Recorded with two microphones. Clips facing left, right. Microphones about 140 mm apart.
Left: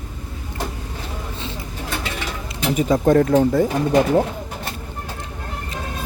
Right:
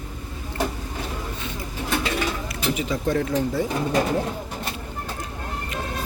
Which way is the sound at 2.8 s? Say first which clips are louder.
Left 11 dB; 50° left (ahead or behind).